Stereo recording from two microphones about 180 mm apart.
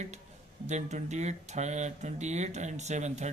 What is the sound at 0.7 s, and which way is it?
Speech, 40° right (ahead or behind).